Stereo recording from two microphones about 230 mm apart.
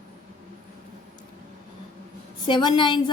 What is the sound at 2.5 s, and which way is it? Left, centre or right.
Speech, centre.